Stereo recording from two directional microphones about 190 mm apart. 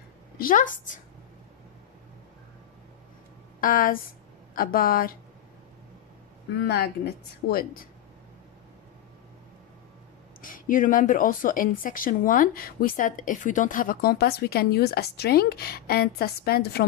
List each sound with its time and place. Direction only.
0.4 s speech: 45° left (ahead or behind)
3.6 s speech: 50° left (ahead or behind)
6.5 s a woman's voice: 60° left (ahead or behind)
10.4 s speech: 45° left (ahead or behind)